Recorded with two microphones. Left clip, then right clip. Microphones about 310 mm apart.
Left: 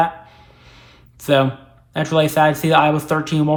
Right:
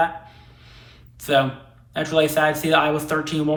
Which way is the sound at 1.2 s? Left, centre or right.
Centre.